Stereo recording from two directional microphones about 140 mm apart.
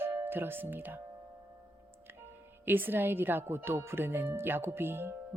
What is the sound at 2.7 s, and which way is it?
Speech, 15° right (ahead or behind).